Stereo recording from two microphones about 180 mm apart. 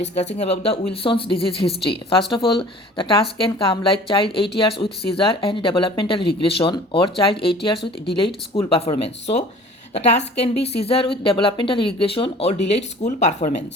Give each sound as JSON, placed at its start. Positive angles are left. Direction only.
{"t": 0.0, "sound": "a woman's voice", "side_deg": 40}
{"t": 9.0, "sound": "a woman's voice", "side_deg": 35}